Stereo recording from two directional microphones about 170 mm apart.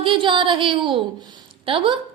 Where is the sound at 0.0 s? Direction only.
30° right (ahead or behind).